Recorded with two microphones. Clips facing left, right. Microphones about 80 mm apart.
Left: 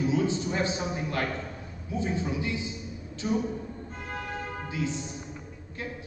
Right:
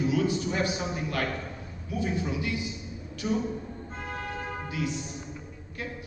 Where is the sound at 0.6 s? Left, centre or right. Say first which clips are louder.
Even; left.